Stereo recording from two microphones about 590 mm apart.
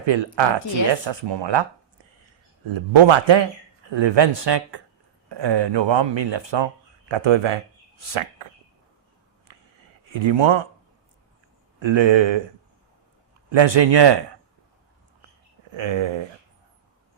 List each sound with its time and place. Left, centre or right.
0.1 s speech: right
2.6 s speech: right
10.1 s speech: right
11.8 s speech: right
13.5 s speech: right
15.7 s speech: right